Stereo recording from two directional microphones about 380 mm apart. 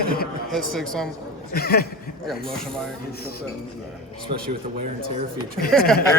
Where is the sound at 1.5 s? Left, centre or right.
Left.